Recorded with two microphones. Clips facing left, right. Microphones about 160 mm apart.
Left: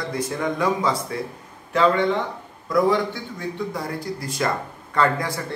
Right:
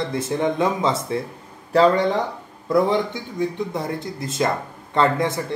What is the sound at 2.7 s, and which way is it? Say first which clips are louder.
Speech: right 1 dB; 20° right (ahead or behind).